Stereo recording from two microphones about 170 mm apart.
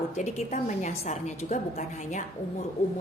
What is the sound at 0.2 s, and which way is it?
A woman's voice, 45° left (ahead or behind).